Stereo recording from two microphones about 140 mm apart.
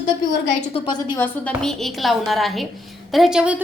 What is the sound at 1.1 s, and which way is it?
Speech, 15° left (ahead or behind).